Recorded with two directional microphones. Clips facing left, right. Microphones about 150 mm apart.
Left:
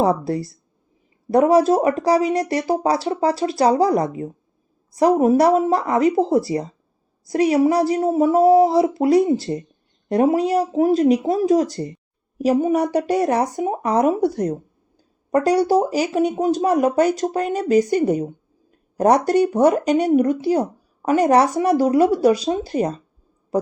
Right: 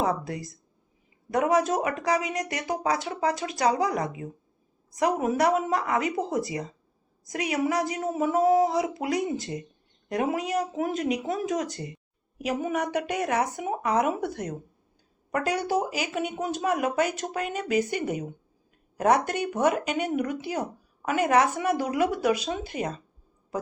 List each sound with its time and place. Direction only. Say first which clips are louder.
0.0 s speech: left 8 dB; 35° left (ahead or behind)